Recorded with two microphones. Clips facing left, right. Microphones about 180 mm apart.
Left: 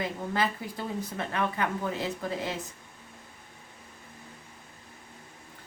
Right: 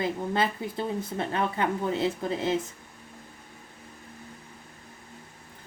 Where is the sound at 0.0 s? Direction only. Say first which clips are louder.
Right 3 dB; 25° right (ahead or behind).